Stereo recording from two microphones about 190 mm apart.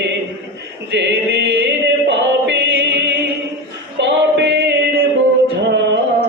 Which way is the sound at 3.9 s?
65° right (ahead or behind).